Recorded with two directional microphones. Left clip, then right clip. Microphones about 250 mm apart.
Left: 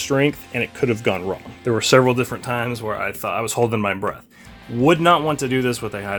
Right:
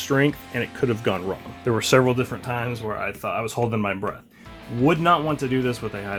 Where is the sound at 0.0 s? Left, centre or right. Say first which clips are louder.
Left 2 dB; centre.